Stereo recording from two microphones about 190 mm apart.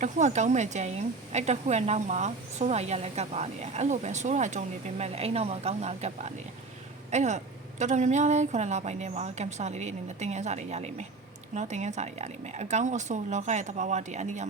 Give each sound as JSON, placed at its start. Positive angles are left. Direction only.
{"t": 0.0, "sound": "a woman's voice", "side_deg": -40}